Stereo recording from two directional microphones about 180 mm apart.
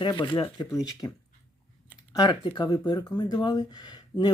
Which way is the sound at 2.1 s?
25° left (ahead or behind).